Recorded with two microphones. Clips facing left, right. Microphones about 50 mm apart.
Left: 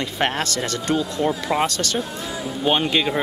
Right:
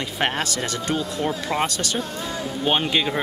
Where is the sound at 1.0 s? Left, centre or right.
Centre.